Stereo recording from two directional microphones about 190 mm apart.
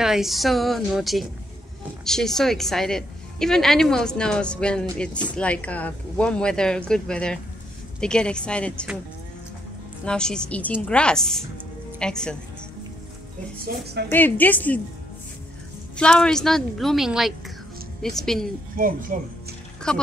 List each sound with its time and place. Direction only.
0.0 s a woman's voice: centre (ahead or behind)
10.0 s a woman's voice: 5° left (ahead or behind)
13.8 s a woman's voice: 60° right (ahead or behind)
14.1 s a woman's voice: 10° left (ahead or behind)
16.0 s a woman's voice: 5° left (ahead or behind)
18.8 s speech: 45° right (ahead or behind)
19.9 s a woman's voice: 5° left (ahead or behind)